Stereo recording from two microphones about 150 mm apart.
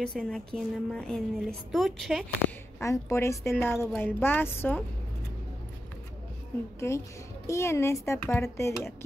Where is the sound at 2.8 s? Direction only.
20° left (ahead or behind).